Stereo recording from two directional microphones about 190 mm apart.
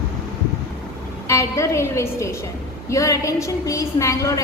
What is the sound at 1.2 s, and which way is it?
A woman's voice, 15° left (ahead or behind).